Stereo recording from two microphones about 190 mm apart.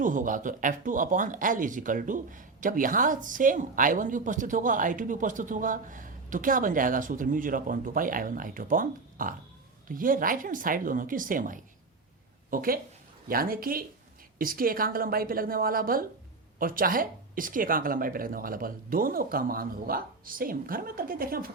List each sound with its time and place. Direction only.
0.0 s speech: 45° right (ahead or behind)